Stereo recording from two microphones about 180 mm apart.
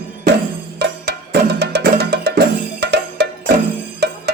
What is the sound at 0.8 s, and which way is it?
Music, 65° right (ahead or behind).